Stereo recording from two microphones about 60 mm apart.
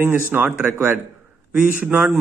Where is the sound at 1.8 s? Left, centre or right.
Right.